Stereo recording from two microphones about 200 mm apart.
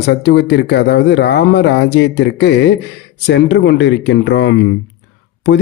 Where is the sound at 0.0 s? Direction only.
60° left (ahead or behind).